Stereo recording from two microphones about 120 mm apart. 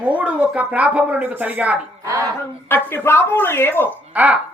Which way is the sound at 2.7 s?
15° left (ahead or behind).